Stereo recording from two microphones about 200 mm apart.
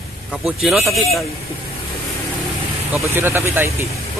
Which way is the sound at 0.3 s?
5° right (ahead or behind).